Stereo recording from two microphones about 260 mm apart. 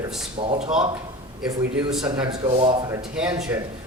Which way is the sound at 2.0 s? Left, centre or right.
Centre.